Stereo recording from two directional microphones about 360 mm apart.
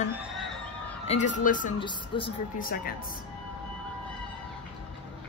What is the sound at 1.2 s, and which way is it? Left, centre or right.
Speech, left.